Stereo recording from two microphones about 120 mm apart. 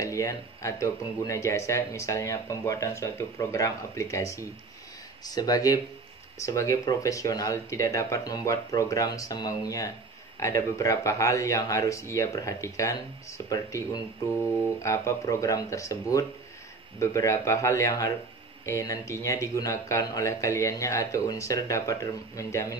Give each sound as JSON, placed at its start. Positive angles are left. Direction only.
{"t": 0.0, "sound": "a man's voice", "side_deg": 25}